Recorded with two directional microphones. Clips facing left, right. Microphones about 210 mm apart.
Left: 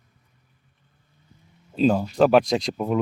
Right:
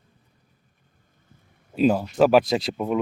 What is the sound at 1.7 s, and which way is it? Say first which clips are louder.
Speech: even; 5° right (ahead or behind).